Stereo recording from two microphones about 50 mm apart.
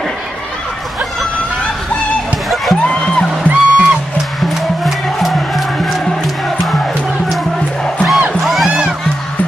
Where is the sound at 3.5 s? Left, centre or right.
Left.